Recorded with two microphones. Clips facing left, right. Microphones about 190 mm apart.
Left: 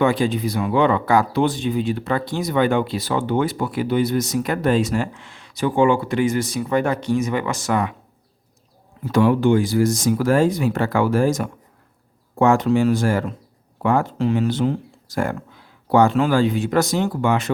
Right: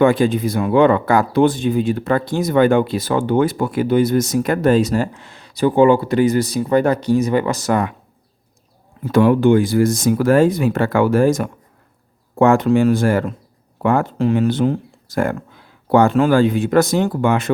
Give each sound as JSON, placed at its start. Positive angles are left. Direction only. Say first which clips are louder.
{"t": 0.0, "sound": "speech", "louder": "right 4 dB", "side_deg": -50}
{"t": 9.0, "sound": "speech", "louder": "right 3 dB", "side_deg": -55}